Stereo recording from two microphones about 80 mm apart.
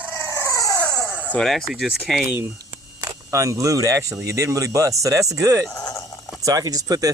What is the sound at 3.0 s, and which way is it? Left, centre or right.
Speech, right.